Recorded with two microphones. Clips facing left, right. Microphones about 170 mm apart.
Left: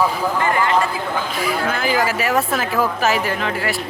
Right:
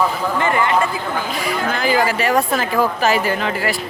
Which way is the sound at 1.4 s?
Centre (ahead or behind).